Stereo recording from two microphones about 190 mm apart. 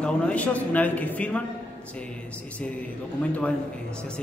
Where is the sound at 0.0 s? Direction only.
5° left (ahead or behind).